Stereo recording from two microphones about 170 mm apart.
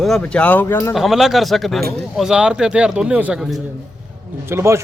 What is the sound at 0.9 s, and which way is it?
A man's voice, centre (ahead or behind).